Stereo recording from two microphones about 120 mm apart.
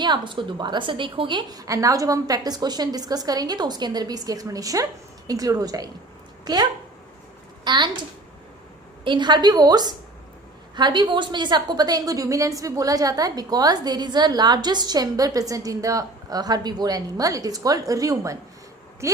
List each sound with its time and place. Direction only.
0.0 s a woman's voice: 40° right (ahead or behind)
9.0 s a woman's voice: 40° right (ahead or behind); by 19.2 s 25° right (ahead or behind)